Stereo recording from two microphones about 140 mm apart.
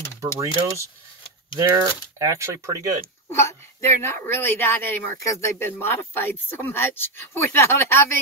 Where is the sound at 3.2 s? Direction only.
20° left (ahead or behind).